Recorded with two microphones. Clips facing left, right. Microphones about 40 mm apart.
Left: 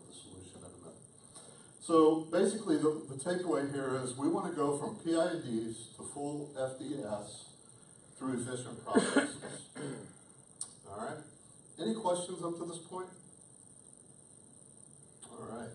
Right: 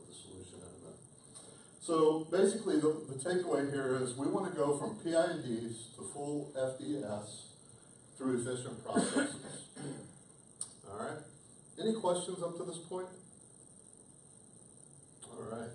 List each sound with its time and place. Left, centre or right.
0.0 s a sound: centre
1.4 s speech: centre
9.8 s beatboxing: left
10.6 s a man's voice: centre
15.2 s speech: centre